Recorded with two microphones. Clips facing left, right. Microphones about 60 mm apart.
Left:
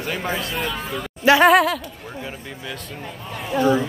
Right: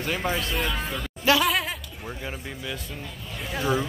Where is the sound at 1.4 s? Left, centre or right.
Left.